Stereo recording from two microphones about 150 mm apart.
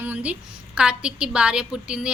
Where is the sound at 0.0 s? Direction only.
10° right (ahead or behind).